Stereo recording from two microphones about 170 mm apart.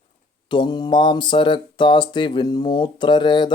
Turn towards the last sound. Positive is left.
turn(degrees=25)  # may be behind; listen again after turning